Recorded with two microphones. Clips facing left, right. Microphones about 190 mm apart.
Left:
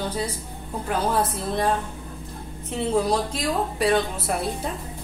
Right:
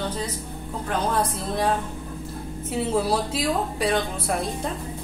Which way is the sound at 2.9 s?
5° right (ahead or behind).